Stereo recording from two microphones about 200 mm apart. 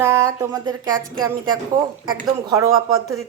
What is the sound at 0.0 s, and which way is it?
Speech, 15° right (ahead or behind).